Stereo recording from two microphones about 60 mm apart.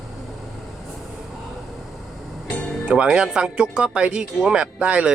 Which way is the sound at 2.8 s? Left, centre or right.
Centre.